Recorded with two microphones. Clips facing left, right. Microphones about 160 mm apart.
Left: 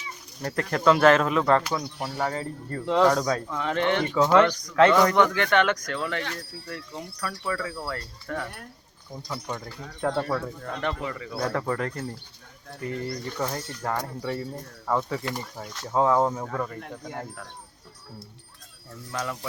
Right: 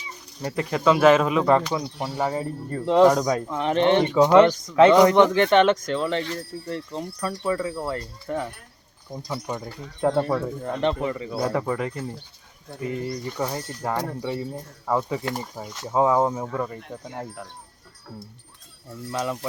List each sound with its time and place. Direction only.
0.4 s speech: 10° right (ahead or behind); by 11.3 s 25° right (ahead or behind)
11.3 s speech: 10° right (ahead or behind)
19.1 s speech: 20° right (ahead or behind)